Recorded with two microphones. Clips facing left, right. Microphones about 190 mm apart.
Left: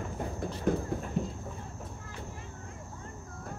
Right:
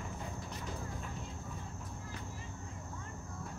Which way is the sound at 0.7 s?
55° left (ahead or behind).